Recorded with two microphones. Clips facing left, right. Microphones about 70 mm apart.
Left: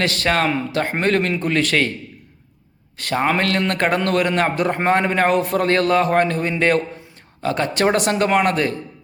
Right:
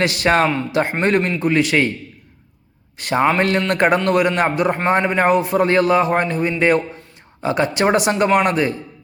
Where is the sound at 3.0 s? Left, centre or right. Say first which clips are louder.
Right 3 dB; centre.